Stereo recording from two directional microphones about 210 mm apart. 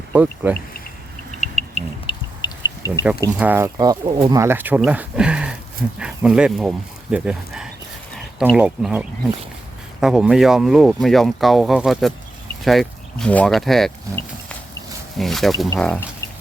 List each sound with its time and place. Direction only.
0.1 s speech: 10° right (ahead or behind)
1.4 s owl: 30° left (ahead or behind)
3.3 s speech: 10° right (ahead or behind)
15.2 s speech: centre (ahead or behind)